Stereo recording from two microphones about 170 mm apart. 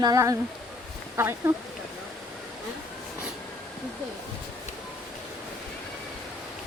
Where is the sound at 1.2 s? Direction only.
15° right (ahead or behind).